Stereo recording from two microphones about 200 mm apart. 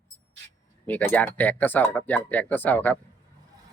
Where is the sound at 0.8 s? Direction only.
10° left (ahead or behind).